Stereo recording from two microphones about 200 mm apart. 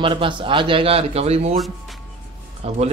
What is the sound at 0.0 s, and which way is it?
A man's voice, 25° right (ahead or behind).